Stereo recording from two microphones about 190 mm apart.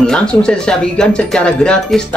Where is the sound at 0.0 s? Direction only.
5° left (ahead or behind).